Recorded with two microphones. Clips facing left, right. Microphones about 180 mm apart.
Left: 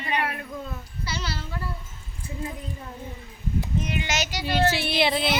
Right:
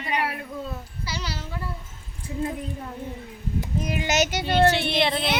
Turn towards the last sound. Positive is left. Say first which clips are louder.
# even
turn(degrees=5)  # may be behind; listen again after turning